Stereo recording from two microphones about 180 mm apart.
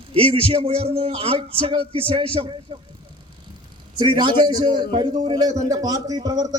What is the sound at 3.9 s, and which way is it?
A man's voice, 25° right (ahead or behind).